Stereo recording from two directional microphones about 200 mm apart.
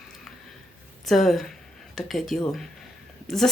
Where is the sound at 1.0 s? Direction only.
Centre (ahead or behind).